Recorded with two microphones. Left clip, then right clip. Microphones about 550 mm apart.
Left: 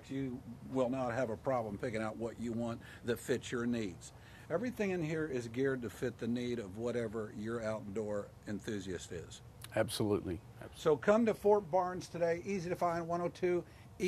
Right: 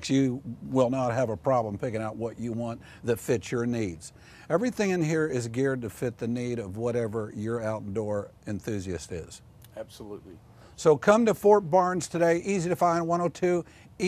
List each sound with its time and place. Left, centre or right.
0.1 s a man's voice: right
0.7 s speech: right
3.3 s speech: right
9.8 s speech: left
10.8 s speech: right